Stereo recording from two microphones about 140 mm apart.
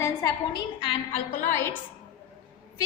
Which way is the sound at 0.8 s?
40° left (ahead or behind).